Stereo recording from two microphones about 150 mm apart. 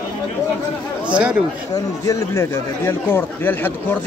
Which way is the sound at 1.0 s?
10° right (ahead or behind).